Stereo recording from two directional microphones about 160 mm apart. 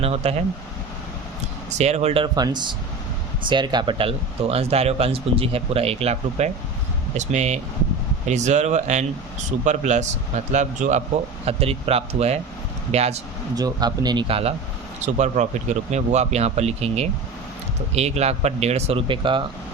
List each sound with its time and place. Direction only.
0.0 s speech: 40° right (ahead or behind)
1.8 s speech: 45° right (ahead or behind)
2.2 s speech: 25° right (ahead or behind); by 11.0 s 50° right (ahead or behind)
11.4 s speech: 40° right (ahead or behind)
13.6 s speech: 25° right (ahead or behind)
15.0 s speech: 45° right (ahead or behind); by 19.4 s 30° right (ahead or behind)